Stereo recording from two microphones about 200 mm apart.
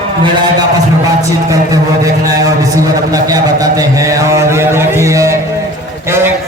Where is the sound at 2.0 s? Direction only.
15° right (ahead or behind).